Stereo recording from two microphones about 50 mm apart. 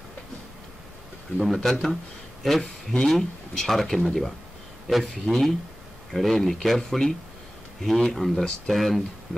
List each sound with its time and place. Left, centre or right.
1.4 s speech: centre
5.0 s speech: centre
6.1 s speech: centre